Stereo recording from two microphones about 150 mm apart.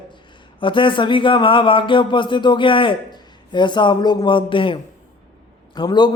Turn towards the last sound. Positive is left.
turn(degrees=30)  # may be behind; listen again after turning